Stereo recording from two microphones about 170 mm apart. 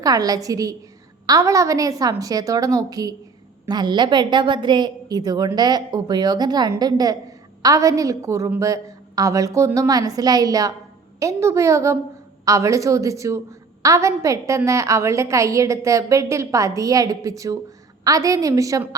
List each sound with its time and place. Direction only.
0.0 s a woman's voice: 20° right (ahead or behind)